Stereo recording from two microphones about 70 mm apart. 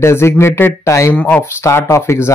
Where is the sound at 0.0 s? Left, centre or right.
Left.